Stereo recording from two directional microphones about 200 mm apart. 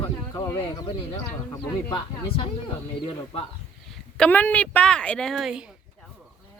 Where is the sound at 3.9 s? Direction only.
5° left (ahead or behind).